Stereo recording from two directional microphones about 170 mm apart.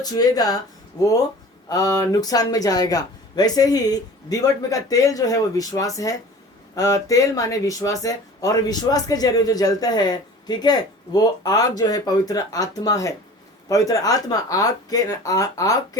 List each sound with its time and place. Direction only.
0.0 s speech: 20° left (ahead or behind)